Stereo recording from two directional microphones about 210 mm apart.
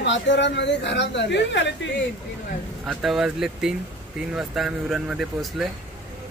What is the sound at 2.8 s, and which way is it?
Speech, centre (ahead or behind).